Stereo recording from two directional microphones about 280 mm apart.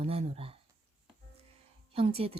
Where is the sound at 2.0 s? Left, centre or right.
Right.